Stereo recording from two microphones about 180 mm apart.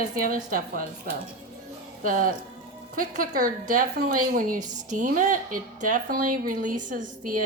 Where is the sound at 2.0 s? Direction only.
50° right (ahead or behind).